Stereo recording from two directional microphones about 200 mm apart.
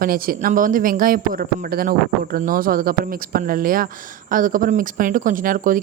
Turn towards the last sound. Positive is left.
turn(degrees=-45)  # may be behind; listen again after turning